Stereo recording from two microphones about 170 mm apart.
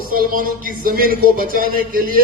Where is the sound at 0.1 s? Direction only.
55° right (ahead or behind).